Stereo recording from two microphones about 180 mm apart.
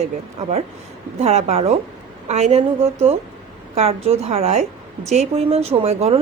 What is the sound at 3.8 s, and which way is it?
Speech, 35° right (ahead or behind).